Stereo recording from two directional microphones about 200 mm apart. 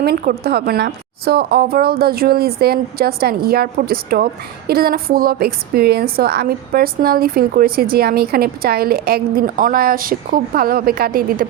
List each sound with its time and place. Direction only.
0.0 s a woman's voice: 50° right (ahead or behind)